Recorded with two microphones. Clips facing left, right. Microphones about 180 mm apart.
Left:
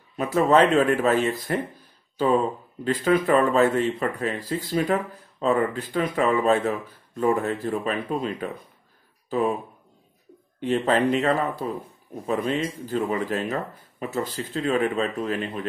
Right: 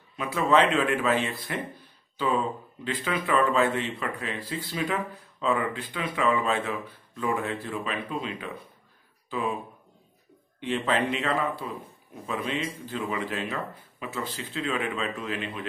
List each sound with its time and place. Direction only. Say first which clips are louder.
0.2 s speech: left 4 dB; 40° left (ahead or behind)
10.6 s speech: left 5 dB; 40° left (ahead or behind)